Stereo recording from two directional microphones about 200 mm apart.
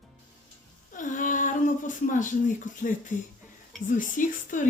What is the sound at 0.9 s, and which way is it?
Speech, 40° left (ahead or behind).